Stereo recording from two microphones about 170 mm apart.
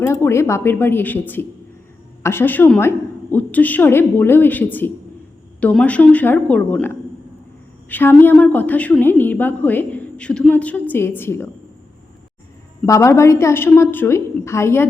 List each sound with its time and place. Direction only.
0.0 s a woman's voice: 15° left (ahead or behind)
2.2 s a woman's voice: 15° left (ahead or behind)
12.8 s a woman's voice: 15° left (ahead or behind)